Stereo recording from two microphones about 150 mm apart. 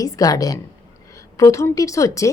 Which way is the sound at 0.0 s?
25° left (ahead or behind).